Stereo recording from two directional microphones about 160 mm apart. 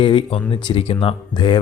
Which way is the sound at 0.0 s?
35° left (ahead or behind).